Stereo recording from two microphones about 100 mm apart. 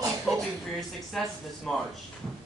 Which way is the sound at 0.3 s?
Centre (ahead or behind).